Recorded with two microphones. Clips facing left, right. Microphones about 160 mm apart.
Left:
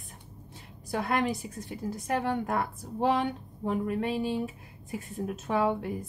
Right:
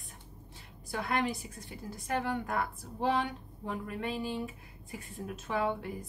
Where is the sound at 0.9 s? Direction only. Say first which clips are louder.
Left 4 dB; 40° left (ahead or behind).